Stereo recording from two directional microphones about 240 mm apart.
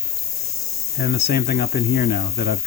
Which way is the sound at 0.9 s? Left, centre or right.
Left.